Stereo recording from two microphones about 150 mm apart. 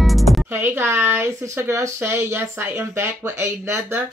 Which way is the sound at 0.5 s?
15° right (ahead or behind).